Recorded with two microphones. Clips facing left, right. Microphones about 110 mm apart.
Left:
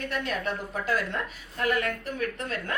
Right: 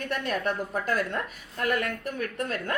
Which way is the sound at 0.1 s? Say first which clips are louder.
Right 4 dB; 50° right (ahead or behind).